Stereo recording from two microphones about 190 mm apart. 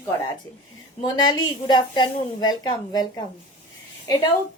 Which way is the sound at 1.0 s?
20° left (ahead or behind).